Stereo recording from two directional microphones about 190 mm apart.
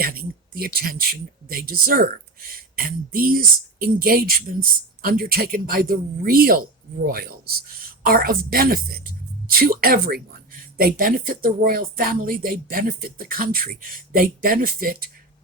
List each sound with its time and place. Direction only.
0.0 s speech: 50° right (ahead or behind)